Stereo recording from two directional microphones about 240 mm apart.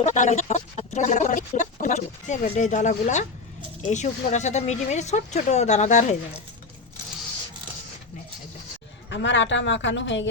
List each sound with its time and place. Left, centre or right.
0.0 s speech: left
9.0 s speech: left